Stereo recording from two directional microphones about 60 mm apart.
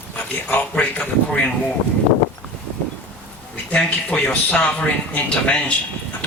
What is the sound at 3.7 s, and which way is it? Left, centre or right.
A man's voice, centre.